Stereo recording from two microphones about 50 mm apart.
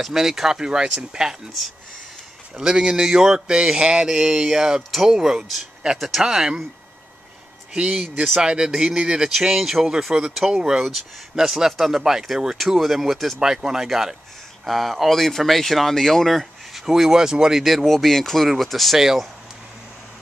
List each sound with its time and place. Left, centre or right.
0.0 s speech: centre
2.5 s speech: centre
4.1 s speech: centre
7.7 s speech: centre
8.0 s speech: centre
8.4 s speech: centre
10.8 s speech: centre
18.9 s speech: centre